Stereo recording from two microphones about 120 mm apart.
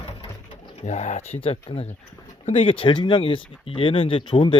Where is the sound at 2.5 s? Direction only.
45° left (ahead or behind).